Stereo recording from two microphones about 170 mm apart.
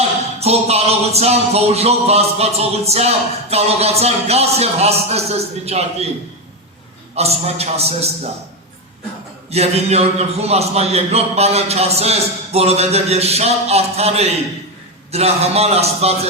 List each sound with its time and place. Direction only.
0.3 s music: 40° right (ahead or behind)
7.2 s music: 40° right (ahead or behind)
9.5 s music: 40° right (ahead or behind)